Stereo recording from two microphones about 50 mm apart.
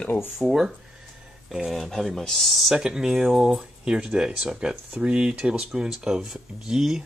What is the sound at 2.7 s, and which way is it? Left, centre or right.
Speech, centre.